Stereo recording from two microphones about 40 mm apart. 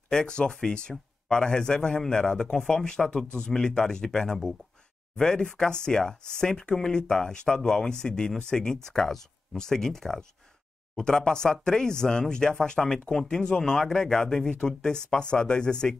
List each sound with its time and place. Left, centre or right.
0.1 s speech: left